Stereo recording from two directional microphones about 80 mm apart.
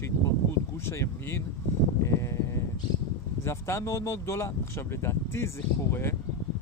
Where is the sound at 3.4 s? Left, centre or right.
Left.